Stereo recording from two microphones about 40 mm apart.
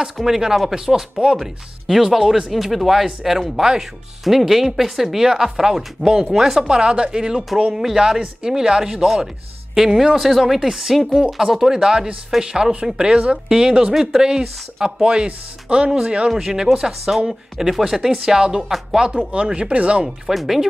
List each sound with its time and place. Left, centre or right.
0.0 s speech: centre
6.6 s speech: centre
9.0 s speech: centre
15.2 s speech: right
18.6 s speech: centre
19.1 s speech: right
20.2 s speech: centre